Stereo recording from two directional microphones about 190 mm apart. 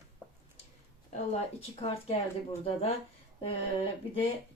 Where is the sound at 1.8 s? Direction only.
30° left (ahead or behind).